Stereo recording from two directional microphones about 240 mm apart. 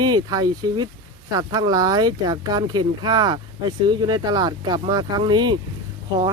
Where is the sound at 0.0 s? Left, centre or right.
Centre.